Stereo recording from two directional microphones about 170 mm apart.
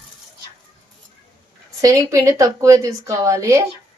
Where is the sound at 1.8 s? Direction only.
20° right (ahead or behind).